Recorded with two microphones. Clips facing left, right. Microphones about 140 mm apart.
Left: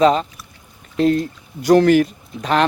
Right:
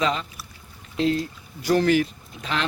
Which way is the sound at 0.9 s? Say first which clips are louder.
Left 6 dB; 50° left (ahead or behind).